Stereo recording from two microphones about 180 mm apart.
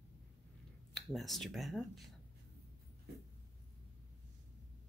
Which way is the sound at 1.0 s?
Centre (ahead or behind).